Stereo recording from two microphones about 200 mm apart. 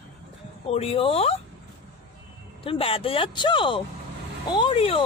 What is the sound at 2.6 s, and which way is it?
Speech, 25° left (ahead or behind).